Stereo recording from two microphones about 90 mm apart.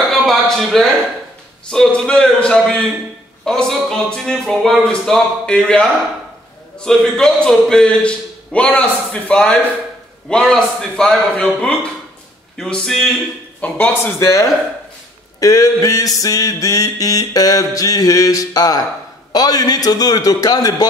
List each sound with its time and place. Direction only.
0.1 s a sound: centre (ahead or behind)
1.7 s a man's voice: 5° left (ahead or behind)
15.4 s mantra: 40° left (ahead or behind)
19.3 s a man's voice: 45° left (ahead or behind)